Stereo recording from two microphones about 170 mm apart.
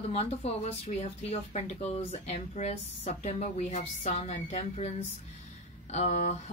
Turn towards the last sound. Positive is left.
turn(degrees=45)  # may be behind; listen again after turning